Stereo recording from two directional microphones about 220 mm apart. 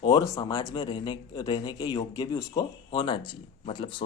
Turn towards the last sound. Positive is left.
turn(degrees=20)  # may be behind; listen again after turning